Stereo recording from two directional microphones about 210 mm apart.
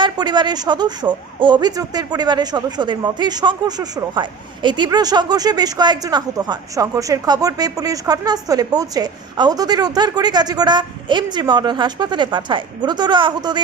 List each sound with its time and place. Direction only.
0.0 s speech: 20° right (ahead or behind)